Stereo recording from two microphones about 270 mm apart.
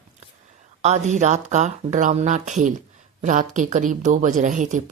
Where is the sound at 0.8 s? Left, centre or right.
Right.